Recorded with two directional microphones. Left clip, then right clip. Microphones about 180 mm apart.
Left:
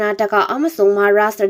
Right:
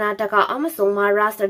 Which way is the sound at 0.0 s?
20° left (ahead or behind).